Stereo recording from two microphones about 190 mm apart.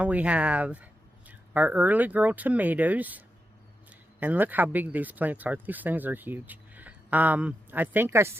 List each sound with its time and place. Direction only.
0.0 s speech: 5° right (ahead or behind)